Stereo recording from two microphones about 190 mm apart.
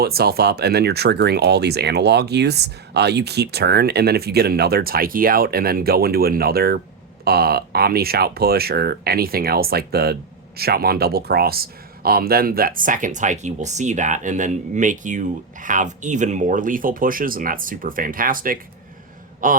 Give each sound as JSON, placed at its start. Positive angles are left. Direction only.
{"t": 0.0, "sound": "speech", "side_deg": -55}